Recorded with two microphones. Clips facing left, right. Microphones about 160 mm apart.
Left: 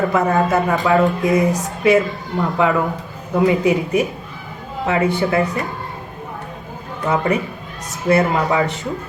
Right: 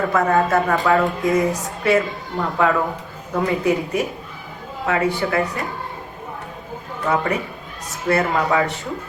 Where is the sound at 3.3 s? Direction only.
20° left (ahead or behind).